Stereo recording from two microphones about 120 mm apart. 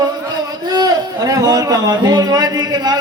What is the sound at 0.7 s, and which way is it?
A man's voice, 35° right (ahead or behind).